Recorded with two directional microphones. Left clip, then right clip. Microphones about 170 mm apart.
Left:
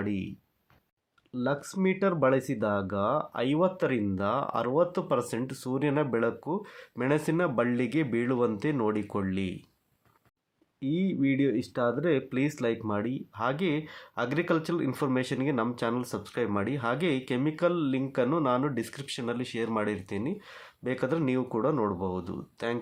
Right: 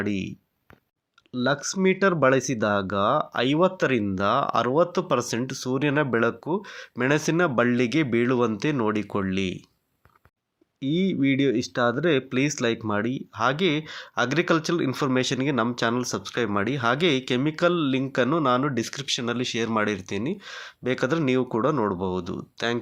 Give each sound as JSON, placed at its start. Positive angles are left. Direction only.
{"t": 0.0, "sound": "speech", "side_deg": -15}
{"t": 10.8, "sound": "speech", "side_deg": -15}